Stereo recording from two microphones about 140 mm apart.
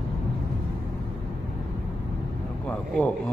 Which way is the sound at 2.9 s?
10° left (ahead or behind).